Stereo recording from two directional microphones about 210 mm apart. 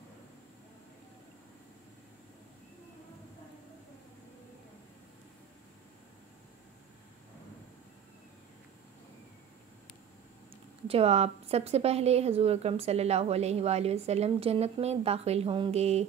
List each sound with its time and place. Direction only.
10.9 s a woman's voice: 30° right (ahead or behind)